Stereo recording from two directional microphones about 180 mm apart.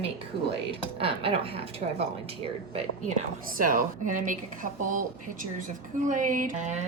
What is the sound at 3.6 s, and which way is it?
A woman's voice, 50° right (ahead or behind).